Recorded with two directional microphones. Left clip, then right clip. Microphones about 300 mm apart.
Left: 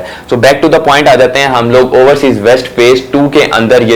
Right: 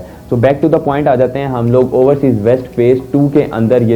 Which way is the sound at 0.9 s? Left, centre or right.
Centre.